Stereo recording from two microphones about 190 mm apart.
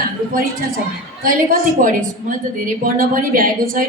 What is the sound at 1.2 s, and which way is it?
A woman's voice, 45° right (ahead or behind).